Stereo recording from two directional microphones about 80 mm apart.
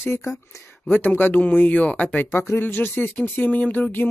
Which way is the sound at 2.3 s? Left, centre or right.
Left.